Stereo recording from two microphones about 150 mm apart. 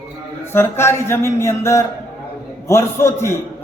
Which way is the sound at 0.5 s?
15° left (ahead or behind).